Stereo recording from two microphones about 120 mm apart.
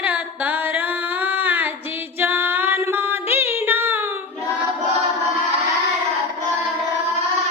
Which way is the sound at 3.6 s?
15° right (ahead or behind).